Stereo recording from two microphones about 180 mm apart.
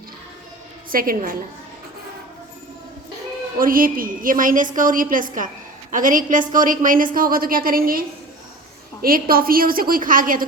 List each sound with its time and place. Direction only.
0.9 s a woman's voice: 50° right (ahead or behind)
3.6 s a woman's voice: 50° right (ahead or behind)